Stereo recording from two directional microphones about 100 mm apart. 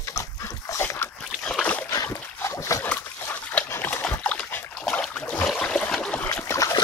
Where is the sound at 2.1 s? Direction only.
25° left (ahead or behind).